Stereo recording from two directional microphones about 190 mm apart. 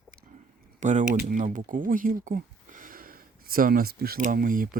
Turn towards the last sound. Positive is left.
turn(degrees=-45)  # may be behind; listen again after turning